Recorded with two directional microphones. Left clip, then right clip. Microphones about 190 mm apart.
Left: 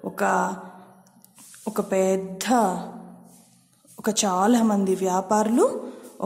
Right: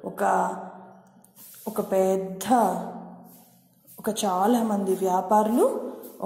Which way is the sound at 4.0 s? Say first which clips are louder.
Left 2 dB; 20° left (ahead or behind).